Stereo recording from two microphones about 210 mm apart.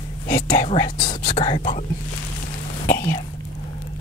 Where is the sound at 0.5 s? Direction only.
25° left (ahead or behind).